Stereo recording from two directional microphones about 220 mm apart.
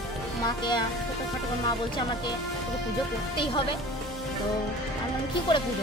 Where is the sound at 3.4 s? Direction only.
20° left (ahead or behind).